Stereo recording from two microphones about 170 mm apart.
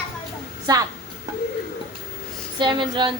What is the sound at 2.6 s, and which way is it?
Speech, 30° right (ahead or behind).